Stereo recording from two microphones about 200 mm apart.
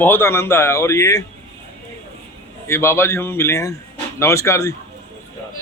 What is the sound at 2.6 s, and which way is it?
A man's voice, 15° left (ahead or behind).